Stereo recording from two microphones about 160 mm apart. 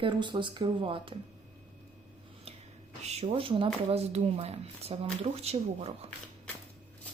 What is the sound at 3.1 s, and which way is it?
Speech, 40° right (ahead or behind).